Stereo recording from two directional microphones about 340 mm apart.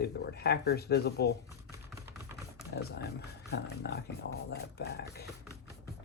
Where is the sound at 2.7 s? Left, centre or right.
Left.